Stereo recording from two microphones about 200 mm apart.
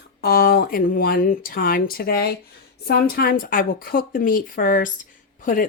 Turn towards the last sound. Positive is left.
turn(degrees=45)  # may be behind; listen again after turning